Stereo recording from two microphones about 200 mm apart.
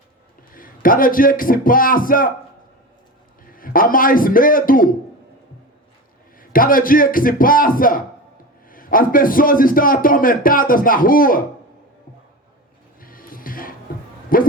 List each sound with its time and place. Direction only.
0.5 s a man's voice: 45° left (ahead or behind)
3.4 s a man's voice: 45° left (ahead or behind)
6.4 s a man's voice: 45° left (ahead or behind)
13.0 s music: 45° left (ahead or behind)
14.3 s a sound: 45° left (ahead or behind)